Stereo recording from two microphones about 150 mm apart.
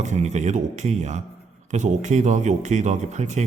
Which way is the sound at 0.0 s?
50° right (ahead or behind).